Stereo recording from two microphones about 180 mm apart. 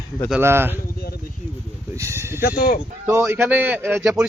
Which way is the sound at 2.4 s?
55° left (ahead or behind).